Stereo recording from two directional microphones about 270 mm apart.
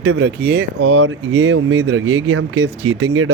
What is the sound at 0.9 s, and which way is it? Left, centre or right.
Speech, right.